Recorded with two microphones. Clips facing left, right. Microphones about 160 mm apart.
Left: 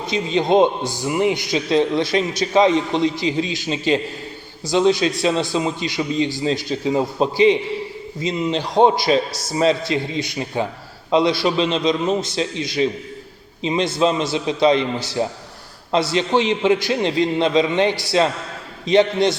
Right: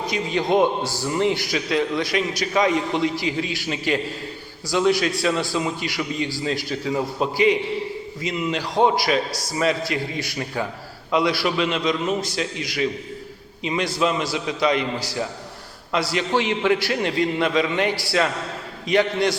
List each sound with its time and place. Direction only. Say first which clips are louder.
0.0 s a man's voice: left 3 dB; 25° left (ahead or behind)